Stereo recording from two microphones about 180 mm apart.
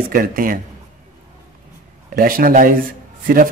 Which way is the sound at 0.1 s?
50° right (ahead or behind).